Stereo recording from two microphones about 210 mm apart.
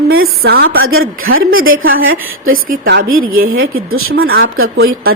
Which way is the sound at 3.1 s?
75° right (ahead or behind).